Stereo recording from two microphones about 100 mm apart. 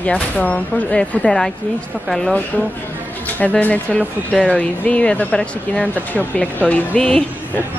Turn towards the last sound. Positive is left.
turn(degrees=10)  # may be behind; listen again after turning